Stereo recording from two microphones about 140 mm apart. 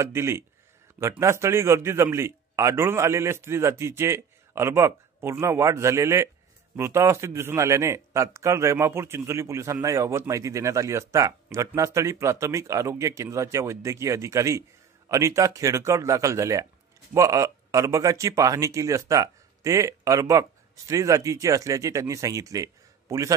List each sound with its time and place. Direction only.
0.0 s speech: 20° right (ahead or behind)